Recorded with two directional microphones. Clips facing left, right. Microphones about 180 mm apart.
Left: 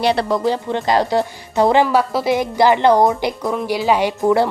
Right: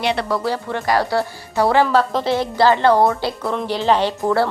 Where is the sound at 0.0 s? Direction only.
35° left (ahead or behind).